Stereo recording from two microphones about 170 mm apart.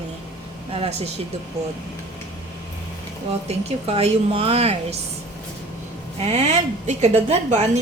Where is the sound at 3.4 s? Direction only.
35° right (ahead or behind).